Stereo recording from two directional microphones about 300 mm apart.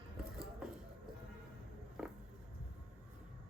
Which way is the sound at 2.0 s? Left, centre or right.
Centre.